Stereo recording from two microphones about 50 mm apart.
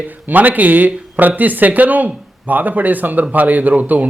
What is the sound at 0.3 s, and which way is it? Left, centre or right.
A man's voice, right.